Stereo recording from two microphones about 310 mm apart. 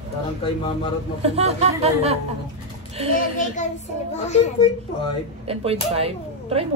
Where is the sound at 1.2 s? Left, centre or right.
Centre.